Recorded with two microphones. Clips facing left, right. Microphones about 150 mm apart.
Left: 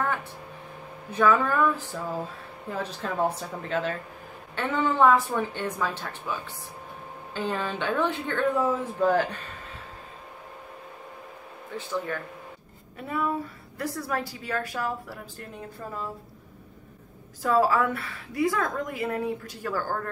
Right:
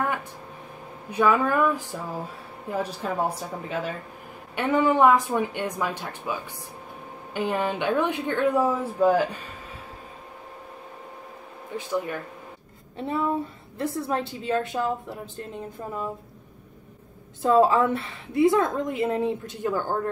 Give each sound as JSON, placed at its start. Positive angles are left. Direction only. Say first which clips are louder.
{"t": 1.1, "sound": "speech", "louder": "right 1 dB", "side_deg": -15}
{"t": 7.3, "sound": "speech", "louder": "right 4 dB", "side_deg": -15}
{"t": 11.7, "sound": "speech", "louder": "right 3 dB", "side_deg": -15}
{"t": 12.9, "sound": "a woman's voice", "louder": "right 3 dB", "side_deg": -25}
{"t": 17.4, "sound": "a woman's voice", "louder": "right 4 dB", "side_deg": -25}